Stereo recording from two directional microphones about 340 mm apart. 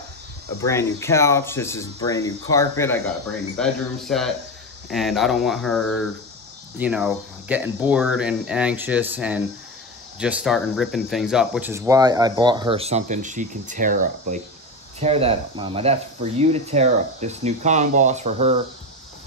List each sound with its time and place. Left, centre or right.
0.6 s speech: centre